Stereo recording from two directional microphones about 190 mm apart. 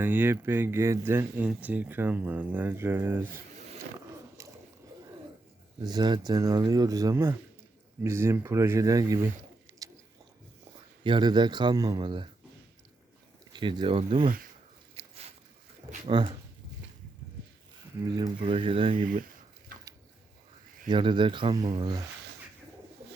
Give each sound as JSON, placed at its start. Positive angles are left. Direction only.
{"t": 0.0, "sound": "speech", "side_deg": -10}
{"t": 4.4, "sound": "a sound", "side_deg": -15}
{"t": 5.8, "sound": "a man's voice", "side_deg": -20}
{"t": 11.0, "sound": "a man's voice", "side_deg": -25}
{"t": 13.5, "sound": "a man's voice", "side_deg": -25}
{"t": 14.9, "sound": "a sound", "side_deg": -35}
{"t": 16.0, "sound": "a man's voice", "side_deg": -30}
{"t": 18.1, "sound": "a man's voice", "side_deg": -25}
{"t": 19.7, "sound": "a sound", "side_deg": -45}
{"t": 20.8, "sound": "a man's voice", "side_deg": -25}